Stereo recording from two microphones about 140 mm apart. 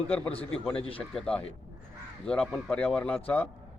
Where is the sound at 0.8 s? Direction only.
40° left (ahead or behind).